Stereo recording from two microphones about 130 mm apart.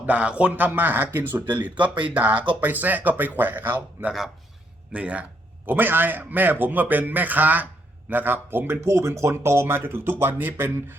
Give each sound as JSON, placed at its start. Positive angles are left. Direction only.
{"t": 0.0, "sound": "speech", "side_deg": -10}
{"t": 1.7, "sound": "speech", "side_deg": -35}
{"t": 2.1, "sound": "speech", "side_deg": -10}